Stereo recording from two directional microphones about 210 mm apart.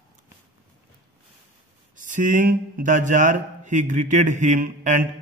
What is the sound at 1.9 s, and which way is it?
A man's voice, 40° right (ahead or behind).